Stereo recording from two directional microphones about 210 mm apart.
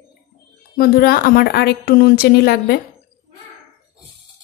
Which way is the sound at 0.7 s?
45° left (ahead or behind).